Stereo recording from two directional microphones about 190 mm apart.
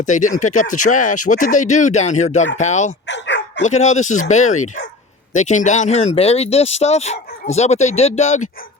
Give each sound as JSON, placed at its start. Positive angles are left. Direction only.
{"t": 0.0, "sound": "speech", "side_deg": 40}
{"t": 3.1, "sound": "bow-wow", "side_deg": 70}
{"t": 3.6, "sound": "speech", "side_deg": 40}